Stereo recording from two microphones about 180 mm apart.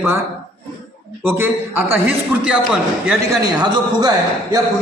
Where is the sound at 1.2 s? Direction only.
10° right (ahead or behind).